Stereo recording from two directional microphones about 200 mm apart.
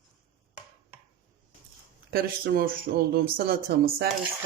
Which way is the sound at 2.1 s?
50° right (ahead or behind).